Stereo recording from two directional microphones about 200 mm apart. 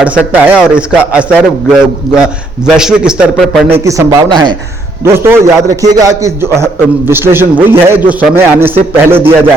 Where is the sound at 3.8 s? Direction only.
15° right (ahead or behind).